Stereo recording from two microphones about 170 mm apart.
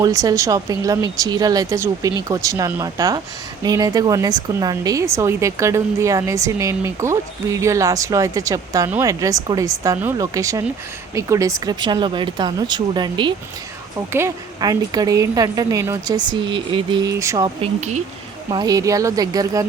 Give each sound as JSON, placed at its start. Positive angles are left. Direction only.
{"t": 0.0, "sound": "a woman's voice", "side_deg": -20}
{"t": 14.1, "sound": "a woman's voice", "side_deg": -15}
{"t": 17.6, "sound": "speech", "side_deg": -45}
{"t": 18.5, "sound": "a woman's voice", "side_deg": -20}